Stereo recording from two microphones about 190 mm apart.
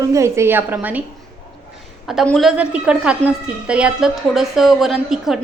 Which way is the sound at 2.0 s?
Centre (ahead or behind).